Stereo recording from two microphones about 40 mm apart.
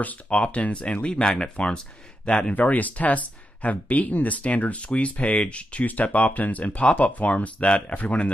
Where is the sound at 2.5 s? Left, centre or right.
Left.